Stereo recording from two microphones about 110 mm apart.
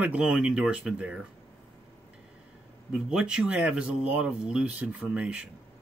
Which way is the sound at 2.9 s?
10° right (ahead or behind).